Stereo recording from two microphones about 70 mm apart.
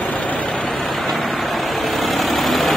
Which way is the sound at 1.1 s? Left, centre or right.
Centre.